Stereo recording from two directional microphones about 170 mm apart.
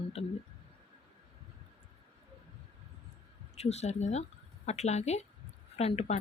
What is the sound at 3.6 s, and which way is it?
Speech, 40° left (ahead or behind).